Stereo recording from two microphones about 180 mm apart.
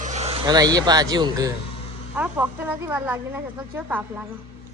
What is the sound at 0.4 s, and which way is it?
Speech, 20° right (ahead or behind).